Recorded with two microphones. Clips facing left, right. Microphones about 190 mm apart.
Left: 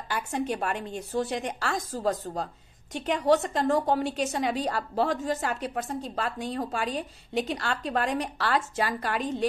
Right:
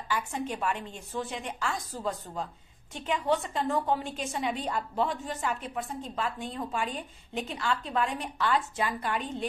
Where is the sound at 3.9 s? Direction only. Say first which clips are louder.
Left 6 dB; 80° left.